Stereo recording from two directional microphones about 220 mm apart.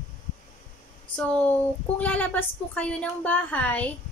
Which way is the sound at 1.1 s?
5° left (ahead or behind).